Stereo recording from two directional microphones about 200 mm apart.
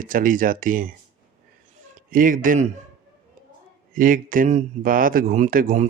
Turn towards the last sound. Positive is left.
turn(degrees=-40)  # may be behind; listen again after turning